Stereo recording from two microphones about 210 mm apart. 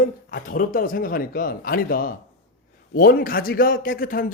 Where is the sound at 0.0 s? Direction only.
40° left (ahead or behind).